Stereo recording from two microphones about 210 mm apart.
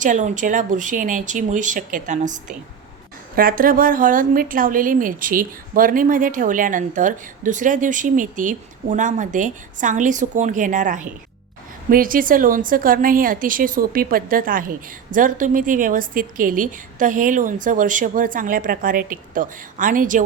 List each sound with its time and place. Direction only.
0.0 s a woman's voice: 35° right (ahead or behind)